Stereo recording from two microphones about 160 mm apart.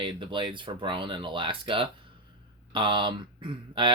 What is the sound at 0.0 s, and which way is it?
Speech, 30° right (ahead or behind).